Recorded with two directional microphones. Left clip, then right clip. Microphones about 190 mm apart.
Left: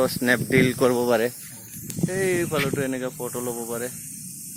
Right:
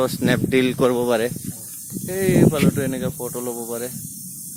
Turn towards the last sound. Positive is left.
turn(degrees=0)  # may be behind; listen again after turning